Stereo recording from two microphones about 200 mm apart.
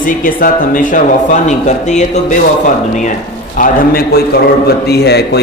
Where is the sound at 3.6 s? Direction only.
50° left (ahead or behind).